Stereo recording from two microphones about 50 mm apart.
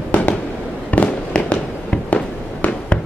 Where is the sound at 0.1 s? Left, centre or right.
Left.